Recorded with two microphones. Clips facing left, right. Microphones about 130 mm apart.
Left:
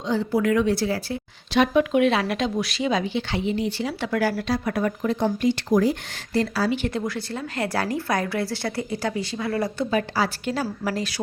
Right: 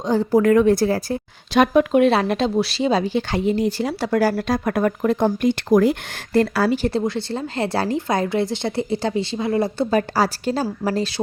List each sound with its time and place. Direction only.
0.1 s a woman's voice: 45° right (ahead or behind)
6.8 s a woman's voice: 30° right (ahead or behind)
9.9 s a woman's voice: 40° right (ahead or behind)